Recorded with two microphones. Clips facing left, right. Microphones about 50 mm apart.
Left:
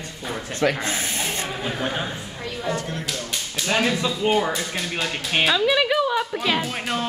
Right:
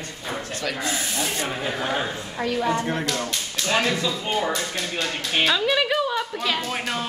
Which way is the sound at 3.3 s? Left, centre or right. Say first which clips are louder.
Even; centre.